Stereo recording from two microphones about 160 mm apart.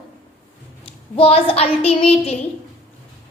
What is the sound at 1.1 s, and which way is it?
A woman's voice, 35° left (ahead or behind).